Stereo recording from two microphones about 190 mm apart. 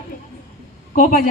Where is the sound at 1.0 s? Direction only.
45° left (ahead or behind).